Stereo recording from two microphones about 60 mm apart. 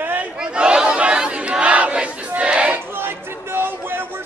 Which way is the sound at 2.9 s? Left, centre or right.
Right.